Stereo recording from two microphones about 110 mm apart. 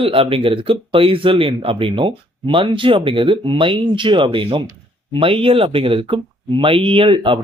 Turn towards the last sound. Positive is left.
turn(degrees=-50)  # may be behind; listen again after turning